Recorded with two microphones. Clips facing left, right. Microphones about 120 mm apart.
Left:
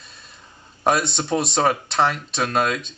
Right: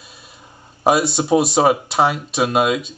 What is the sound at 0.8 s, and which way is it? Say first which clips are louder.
Speech: right 5 dB; 5° right (ahead or behind).